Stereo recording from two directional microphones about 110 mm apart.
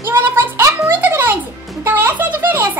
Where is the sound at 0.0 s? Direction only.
20° right (ahead or behind).